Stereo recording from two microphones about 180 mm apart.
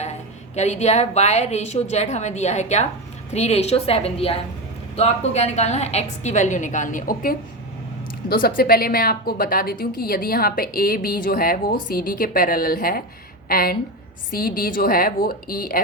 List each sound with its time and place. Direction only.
0.5 s a woman's voice: 40° left (ahead or behind)